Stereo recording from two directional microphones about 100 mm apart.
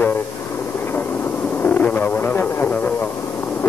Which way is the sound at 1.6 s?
15° left (ahead or behind).